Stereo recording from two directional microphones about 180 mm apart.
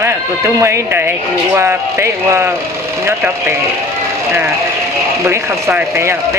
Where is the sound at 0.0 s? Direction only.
15° right (ahead or behind).